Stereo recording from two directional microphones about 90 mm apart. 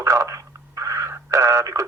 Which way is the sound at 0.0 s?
35° right (ahead or behind).